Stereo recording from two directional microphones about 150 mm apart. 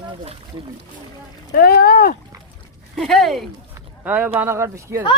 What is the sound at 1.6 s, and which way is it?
Speech, 90° left.